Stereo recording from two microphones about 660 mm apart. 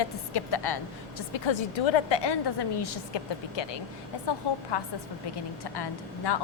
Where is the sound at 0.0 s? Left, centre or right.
Left.